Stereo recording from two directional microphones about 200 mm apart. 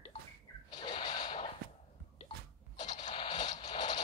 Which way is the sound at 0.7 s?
20° left (ahead or behind).